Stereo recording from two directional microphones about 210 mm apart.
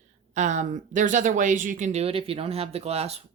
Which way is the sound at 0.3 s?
35° right (ahead or behind).